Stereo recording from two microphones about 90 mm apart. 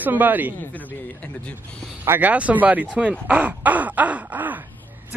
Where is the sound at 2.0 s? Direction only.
25° right (ahead or behind).